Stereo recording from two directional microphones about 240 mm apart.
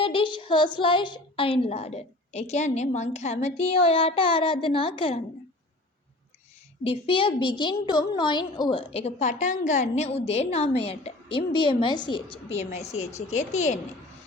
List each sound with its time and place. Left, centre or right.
0.0 s a woman's voice: left
6.8 s a woman's voice: left